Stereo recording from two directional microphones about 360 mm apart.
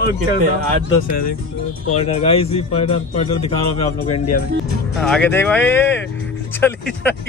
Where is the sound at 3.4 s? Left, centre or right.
Left.